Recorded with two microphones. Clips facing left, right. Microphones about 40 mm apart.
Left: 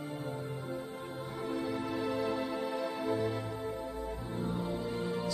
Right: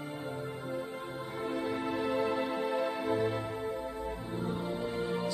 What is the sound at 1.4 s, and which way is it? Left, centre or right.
Music, right.